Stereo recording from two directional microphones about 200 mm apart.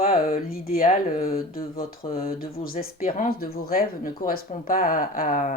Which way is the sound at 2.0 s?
30° left (ahead or behind).